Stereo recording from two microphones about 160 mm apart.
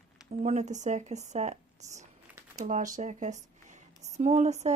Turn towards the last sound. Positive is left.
turn(degrees=-45)  # may be behind; listen again after turning